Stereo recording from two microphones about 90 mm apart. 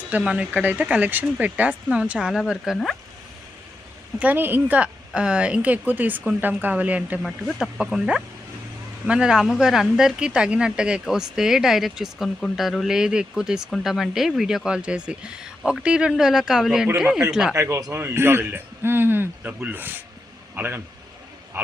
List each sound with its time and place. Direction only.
0.1 s a woman's voice: 10° right (ahead or behind)
4.2 s a woman's voice: 20° right (ahead or behind)
7.2 s a woman's voice: centre (ahead or behind)
17.5 s speech: 35° right (ahead or behind)
17.9 s a man's voice: 25° right (ahead or behind)